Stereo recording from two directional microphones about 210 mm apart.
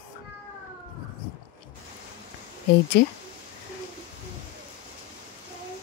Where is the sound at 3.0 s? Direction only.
50° left (ahead or behind).